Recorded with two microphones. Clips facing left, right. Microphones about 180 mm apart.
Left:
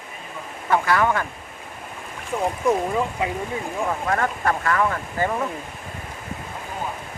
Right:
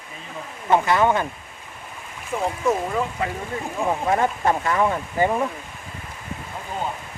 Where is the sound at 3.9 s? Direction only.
20° right (ahead or behind).